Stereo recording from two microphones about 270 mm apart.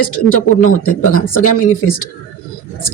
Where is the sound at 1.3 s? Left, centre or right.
Left.